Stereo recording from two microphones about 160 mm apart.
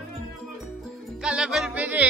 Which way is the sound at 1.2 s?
5° right (ahead or behind).